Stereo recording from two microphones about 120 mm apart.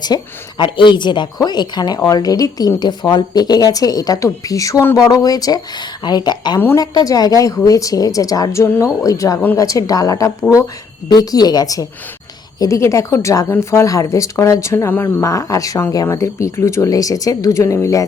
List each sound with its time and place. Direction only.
0.0 s speech: 35° left (ahead or behind)